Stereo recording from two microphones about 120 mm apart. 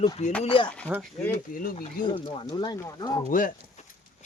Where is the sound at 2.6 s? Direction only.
35° left (ahead or behind).